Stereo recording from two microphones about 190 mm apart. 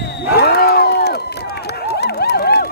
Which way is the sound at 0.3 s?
55° left (ahead or behind).